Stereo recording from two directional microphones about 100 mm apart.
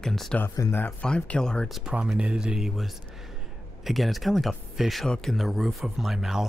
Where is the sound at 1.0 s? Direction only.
10° left (ahead or behind).